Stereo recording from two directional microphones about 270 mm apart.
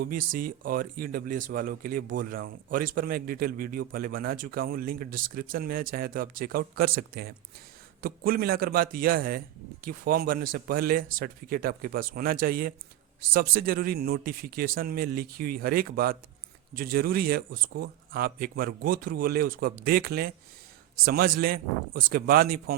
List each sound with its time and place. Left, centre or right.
0.0 s speech: right